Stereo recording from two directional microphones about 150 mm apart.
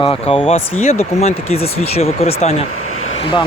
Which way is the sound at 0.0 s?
35° left (ahead or behind).